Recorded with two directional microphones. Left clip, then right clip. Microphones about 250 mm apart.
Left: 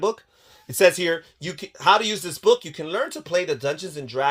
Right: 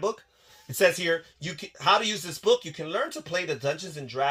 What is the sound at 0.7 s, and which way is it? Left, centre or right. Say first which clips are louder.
Speech: left 5 dB; left.